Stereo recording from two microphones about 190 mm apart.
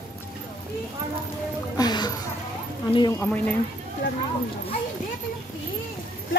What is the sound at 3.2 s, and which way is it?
Speech, 10° left (ahead or behind).